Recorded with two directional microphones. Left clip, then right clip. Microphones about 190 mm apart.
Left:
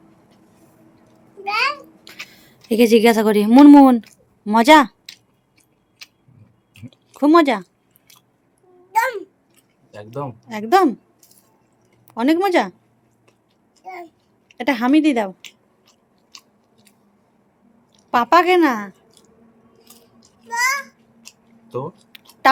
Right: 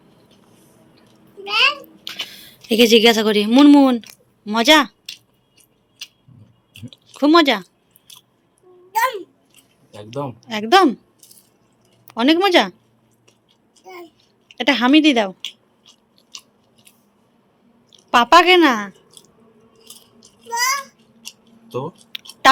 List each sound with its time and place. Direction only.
1.5 s a sound: 15° left (ahead or behind)
4.4 s speech: 25° left (ahead or behind)
6.9 s speech: 15° left (ahead or behind)
8.9 s babbling: 10° left (ahead or behind)
10.4 s a woman's voice: centre (ahead or behind)
12.0 s a woman's voice: 5° left (ahead or behind)
13.8 s a child's voice: 10° left (ahead or behind)
18.1 s a woman's voice: centre (ahead or behind)
19.8 s rattle: 10° right (ahead or behind)
20.5 s a sound: 10° left (ahead or behind)
21.2 s a sound: 15° right (ahead or behind)